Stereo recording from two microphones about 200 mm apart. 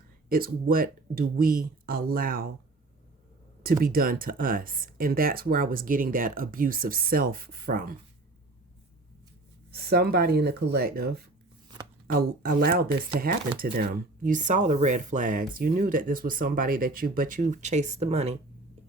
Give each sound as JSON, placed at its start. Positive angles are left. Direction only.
{"t": 0.3, "sound": "speech", "side_deg": -45}
{"t": 3.6, "sound": "speech", "side_deg": -45}
{"t": 9.7, "sound": "speech", "side_deg": -50}